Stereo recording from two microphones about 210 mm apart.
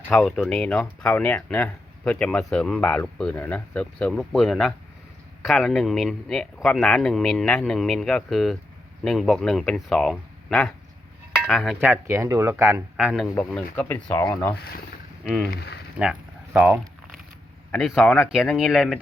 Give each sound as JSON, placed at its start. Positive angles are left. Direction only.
{"t": 0.1, "sound": "speech", "side_deg": 0}
{"t": 13.3, "sound": "speech", "side_deg": 5}
{"t": 14.5, "sound": "speech", "side_deg": 50}
{"t": 15.2, "sound": "speech", "side_deg": 0}
{"t": 15.4, "sound": "speech", "side_deg": 50}
{"t": 16.0, "sound": "a sound", "side_deg": -5}
{"t": 17.7, "sound": "speech", "side_deg": 0}